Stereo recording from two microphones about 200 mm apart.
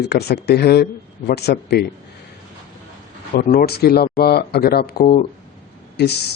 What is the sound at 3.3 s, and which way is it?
Speech, 40° left (ahead or behind).